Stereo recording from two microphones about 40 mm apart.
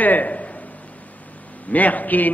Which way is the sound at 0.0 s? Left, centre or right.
Left.